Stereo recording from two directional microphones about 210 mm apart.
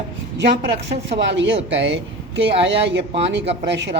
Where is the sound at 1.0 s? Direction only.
55° right (ahead or behind).